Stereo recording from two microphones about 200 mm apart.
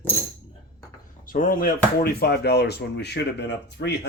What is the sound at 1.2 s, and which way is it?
Speech, 45° left (ahead or behind).